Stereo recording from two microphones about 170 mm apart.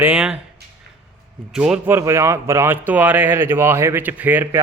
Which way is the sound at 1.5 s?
5° right (ahead or behind).